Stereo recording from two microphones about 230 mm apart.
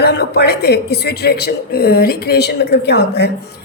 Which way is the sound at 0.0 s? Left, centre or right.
Left.